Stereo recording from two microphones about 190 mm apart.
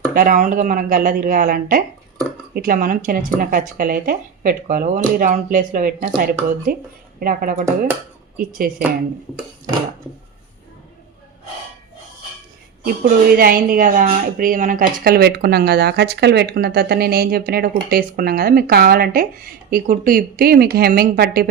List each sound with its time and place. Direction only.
0.1 s speech: 50° right (ahead or behind)
12.8 s speech: 50° right (ahead or behind)